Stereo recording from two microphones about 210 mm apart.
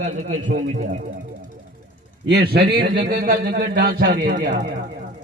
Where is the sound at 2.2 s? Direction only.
50° right (ahead or behind).